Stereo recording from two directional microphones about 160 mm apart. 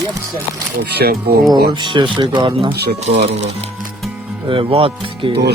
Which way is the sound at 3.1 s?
40° right (ahead or behind).